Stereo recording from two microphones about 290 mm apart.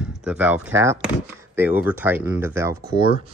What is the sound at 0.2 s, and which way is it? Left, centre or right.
Speech, centre.